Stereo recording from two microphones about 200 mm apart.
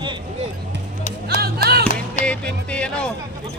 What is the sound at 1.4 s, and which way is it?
Music, 50° right (ahead or behind).